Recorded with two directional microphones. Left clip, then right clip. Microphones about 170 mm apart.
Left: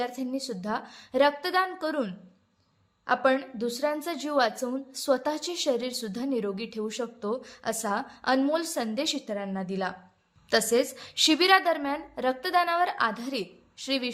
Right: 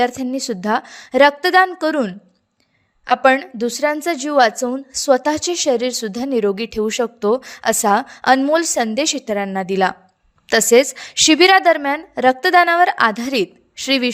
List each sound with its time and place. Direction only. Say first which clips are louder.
0.0 s a woman's voice: right 13 dB; 50° right (ahead or behind)